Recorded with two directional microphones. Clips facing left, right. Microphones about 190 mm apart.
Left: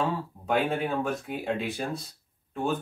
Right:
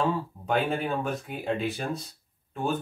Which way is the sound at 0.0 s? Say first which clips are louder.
Right 2 dB; centre (ahead or behind).